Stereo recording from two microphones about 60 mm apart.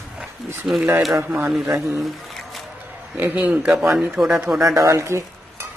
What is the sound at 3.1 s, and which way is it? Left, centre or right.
Speech, right.